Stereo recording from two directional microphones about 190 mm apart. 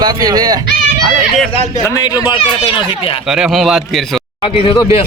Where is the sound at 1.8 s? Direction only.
20° left (ahead or behind).